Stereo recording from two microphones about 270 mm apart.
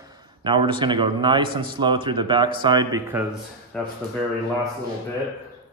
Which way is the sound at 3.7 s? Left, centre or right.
Centre.